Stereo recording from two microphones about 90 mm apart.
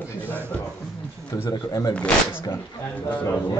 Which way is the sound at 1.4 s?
45° left (ahead or behind).